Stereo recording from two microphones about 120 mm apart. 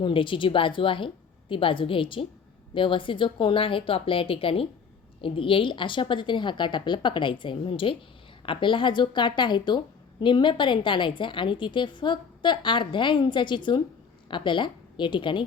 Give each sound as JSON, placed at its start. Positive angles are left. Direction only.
{"t": 0.0, "sound": "a woman's voice", "side_deg": 45}